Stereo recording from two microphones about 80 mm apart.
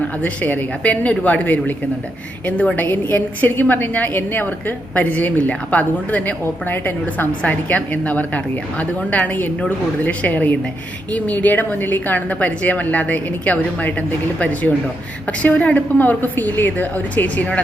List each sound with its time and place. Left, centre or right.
0.2 s a woman's voice: centre